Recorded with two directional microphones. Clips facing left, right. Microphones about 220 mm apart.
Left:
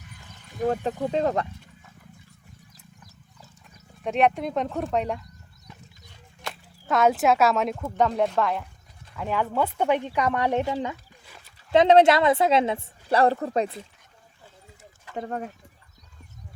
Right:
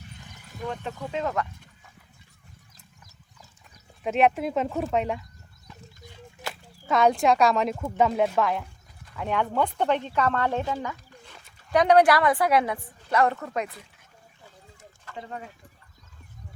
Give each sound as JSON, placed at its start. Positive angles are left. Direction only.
{"t": 0.6, "sound": "speech", "side_deg": 40}
{"t": 4.0, "sound": "speech", "side_deg": 0}
{"t": 6.4, "sound": "a woman's voice", "side_deg": 0}
{"t": 15.1, "sound": "speech", "side_deg": 50}